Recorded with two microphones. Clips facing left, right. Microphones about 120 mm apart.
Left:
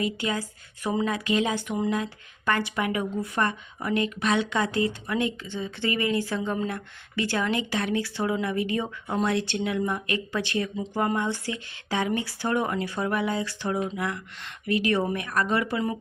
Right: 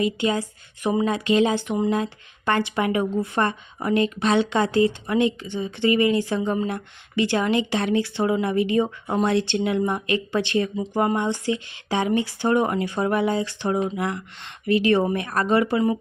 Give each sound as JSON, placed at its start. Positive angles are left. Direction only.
{"t": 0.0, "sound": "speech", "side_deg": -25}